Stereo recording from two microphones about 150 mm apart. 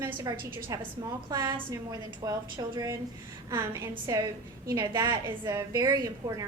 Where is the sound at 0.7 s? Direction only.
25° right (ahead or behind).